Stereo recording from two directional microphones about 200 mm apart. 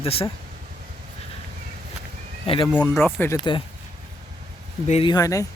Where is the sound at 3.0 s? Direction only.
10° left (ahead or behind).